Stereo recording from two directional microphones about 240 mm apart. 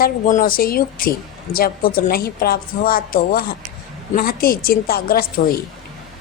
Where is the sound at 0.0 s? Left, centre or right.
Left.